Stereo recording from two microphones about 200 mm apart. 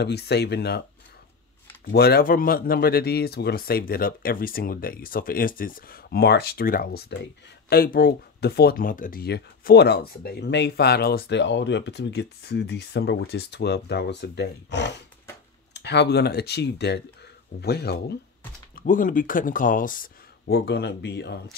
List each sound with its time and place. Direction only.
0.0 s speech: 55° left (ahead or behind)
1.9 s speech: 50° left (ahead or behind)
18.8 s speech: 45° left (ahead or behind)